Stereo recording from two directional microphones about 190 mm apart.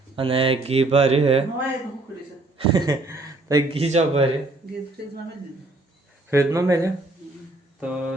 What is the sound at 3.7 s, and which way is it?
Speech, 35° right (ahead or behind).